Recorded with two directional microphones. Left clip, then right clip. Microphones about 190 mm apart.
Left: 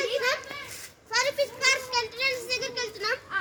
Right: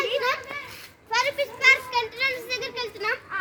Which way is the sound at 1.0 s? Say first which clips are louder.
Right 2 dB; 25° right (ahead or behind).